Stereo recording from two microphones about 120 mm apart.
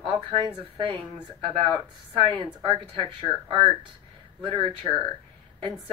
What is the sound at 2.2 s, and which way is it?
A woman's voice, 45° right (ahead or behind).